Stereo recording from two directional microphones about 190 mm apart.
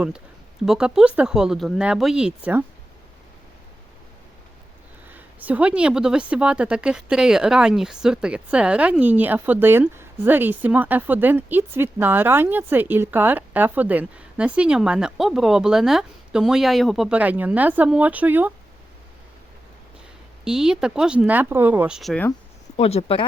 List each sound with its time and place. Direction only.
0.6 s speech: 5° right (ahead or behind)
5.1 s a woman's voice: 10° right (ahead or behind)
20.4 s speech: 5° right (ahead or behind)
22.8 s speech: 30° left (ahead or behind)